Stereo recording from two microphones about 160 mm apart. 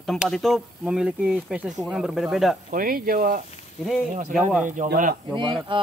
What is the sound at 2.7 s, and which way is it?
Speech, 60° right (ahead or behind).